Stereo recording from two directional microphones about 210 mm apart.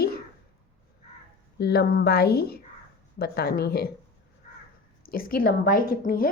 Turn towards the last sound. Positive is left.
turn(degrees=40)  # may be behind; listen again after turning